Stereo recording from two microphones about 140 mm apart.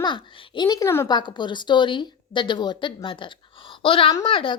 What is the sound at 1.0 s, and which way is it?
A woman's voice, 30° left (ahead or behind).